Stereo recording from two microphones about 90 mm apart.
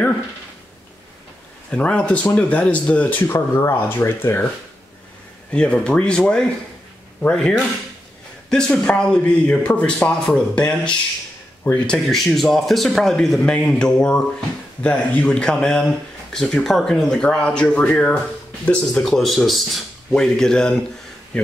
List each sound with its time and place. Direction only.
1.7 s speech: 10° left (ahead or behind)
5.5 s speech: 10° left (ahead or behind)
11.6 s speech: 10° left (ahead or behind)
13.4 s speech: 15° left (ahead or behind)